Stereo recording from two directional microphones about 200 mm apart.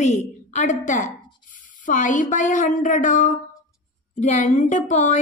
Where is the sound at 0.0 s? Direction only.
35° left (ahead or behind).